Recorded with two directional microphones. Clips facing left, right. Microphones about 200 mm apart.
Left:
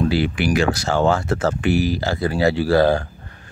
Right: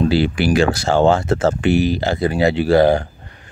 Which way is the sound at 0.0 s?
30° right (ahead or behind).